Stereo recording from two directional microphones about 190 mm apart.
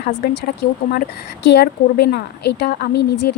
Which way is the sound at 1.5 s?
60° left (ahead or behind).